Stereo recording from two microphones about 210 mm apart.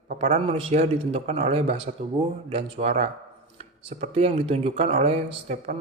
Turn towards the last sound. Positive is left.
turn(degrees=-30)  # may be behind; listen again after turning